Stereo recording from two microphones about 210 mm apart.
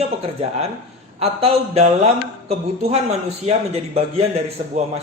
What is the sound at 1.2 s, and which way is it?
A woman's voice, 30° right (ahead or behind).